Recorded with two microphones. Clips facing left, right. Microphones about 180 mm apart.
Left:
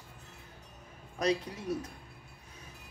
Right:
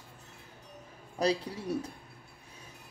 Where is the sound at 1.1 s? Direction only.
30° right (ahead or behind).